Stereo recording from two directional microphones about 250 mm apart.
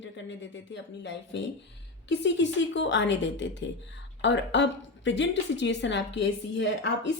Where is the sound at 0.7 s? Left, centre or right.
Left.